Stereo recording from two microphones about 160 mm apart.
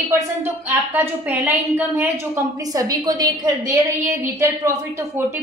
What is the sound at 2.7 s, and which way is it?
Speech, 25° right (ahead or behind).